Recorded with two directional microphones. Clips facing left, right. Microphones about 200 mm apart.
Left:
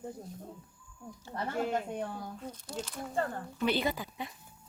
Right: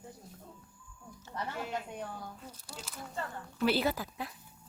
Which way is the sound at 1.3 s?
45° left (ahead or behind).